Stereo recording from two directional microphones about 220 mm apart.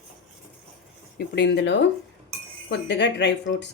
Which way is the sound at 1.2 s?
50° left (ahead or behind).